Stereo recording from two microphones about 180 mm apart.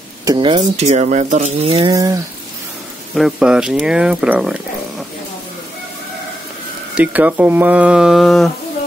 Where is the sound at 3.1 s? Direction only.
Centre (ahead or behind).